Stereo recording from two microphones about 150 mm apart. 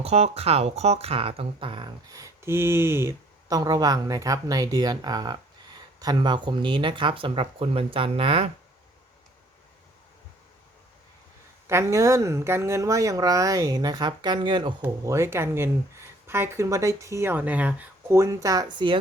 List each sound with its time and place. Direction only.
0.0 s speech: 45° right (ahead or behind)
11.7 s speech: 20° right (ahead or behind)
14.8 s speech: 20° right (ahead or behind)